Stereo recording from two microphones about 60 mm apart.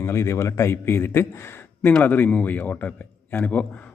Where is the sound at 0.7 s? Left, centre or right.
Left.